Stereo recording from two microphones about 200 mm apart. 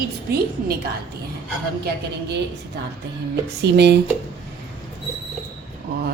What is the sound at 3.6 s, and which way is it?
Speech, 55° right (ahead or behind).